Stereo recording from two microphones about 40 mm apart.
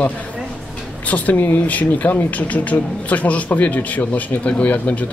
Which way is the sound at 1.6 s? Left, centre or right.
Left.